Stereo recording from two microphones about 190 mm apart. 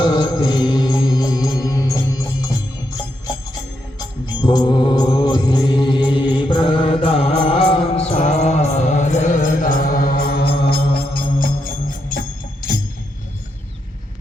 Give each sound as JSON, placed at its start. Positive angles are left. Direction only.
{"t": 0.0, "sound": "music", "side_deg": 25}
{"t": 3.9, "sound": "music", "side_deg": 25}